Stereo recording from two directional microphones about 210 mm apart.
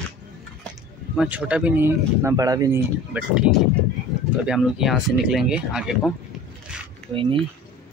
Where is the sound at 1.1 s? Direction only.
5° right (ahead or behind).